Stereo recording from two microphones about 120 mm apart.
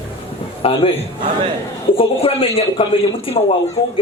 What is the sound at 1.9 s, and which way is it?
A woman's voice, 50° left (ahead or behind).